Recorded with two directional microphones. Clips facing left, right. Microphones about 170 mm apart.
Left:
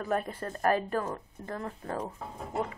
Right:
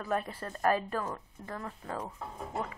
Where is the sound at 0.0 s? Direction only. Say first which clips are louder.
Left 2 dB; 45° left (ahead or behind); by 2.0 s 30° left (ahead or behind).